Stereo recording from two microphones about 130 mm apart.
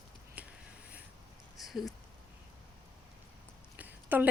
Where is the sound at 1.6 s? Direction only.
Centre (ahead or behind).